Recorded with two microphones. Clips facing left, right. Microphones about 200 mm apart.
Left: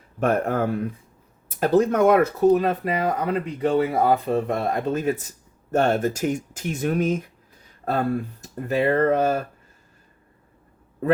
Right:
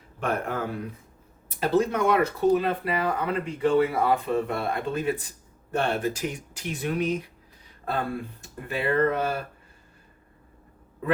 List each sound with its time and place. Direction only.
0.2 s speech: 45° left (ahead or behind)